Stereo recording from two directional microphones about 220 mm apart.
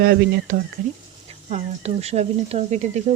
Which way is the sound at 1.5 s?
30° right (ahead or behind).